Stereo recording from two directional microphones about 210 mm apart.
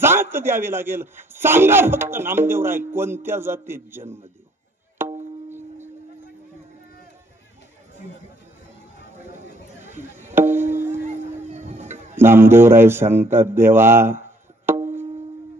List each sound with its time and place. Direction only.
0.0 s a man's voice: 10° right (ahead or behind)
5.0 s music: 10° right (ahead or behind)
9.9 s music: 10° right (ahead or behind)
11.5 s a sound: 35° right (ahead or behind)
12.2 s a man's voice: 10° right (ahead or behind)
14.7 s music: 10° right (ahead or behind)